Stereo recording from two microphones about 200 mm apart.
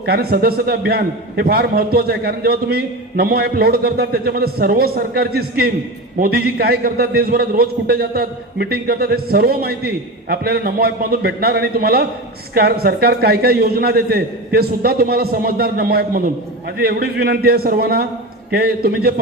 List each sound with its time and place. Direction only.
0.0 s a man's voice: 50° right (ahead or behind)